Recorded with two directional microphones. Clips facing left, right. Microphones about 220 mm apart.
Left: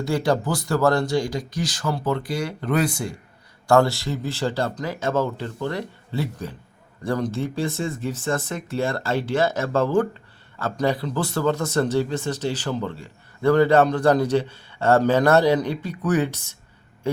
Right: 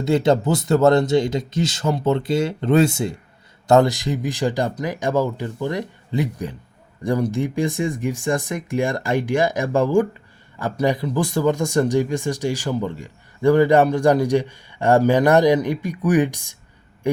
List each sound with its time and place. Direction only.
0.0 s speech: 20° right (ahead or behind)